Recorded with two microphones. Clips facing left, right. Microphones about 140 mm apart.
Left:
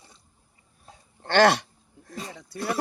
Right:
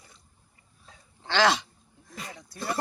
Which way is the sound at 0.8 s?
55° left (ahead or behind).